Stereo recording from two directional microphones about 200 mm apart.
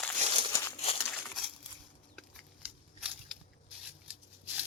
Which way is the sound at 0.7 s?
30° left (ahead or behind).